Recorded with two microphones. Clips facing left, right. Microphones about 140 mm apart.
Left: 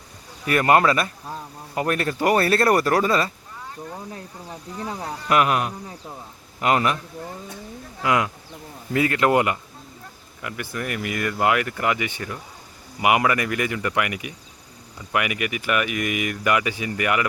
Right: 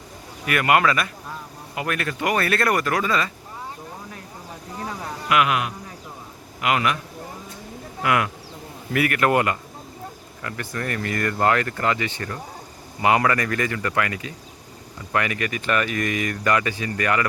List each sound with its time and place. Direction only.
0.4 s speech: 35° left (ahead or behind)
4.9 s speech: 35° left (ahead or behind)
8.0 s speech: 20° left (ahead or behind)